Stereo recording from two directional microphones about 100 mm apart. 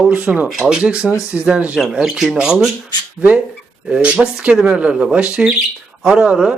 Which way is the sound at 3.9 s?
15° right (ahead or behind).